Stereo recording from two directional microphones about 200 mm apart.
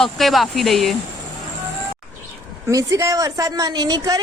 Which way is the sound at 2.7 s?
15° right (ahead or behind).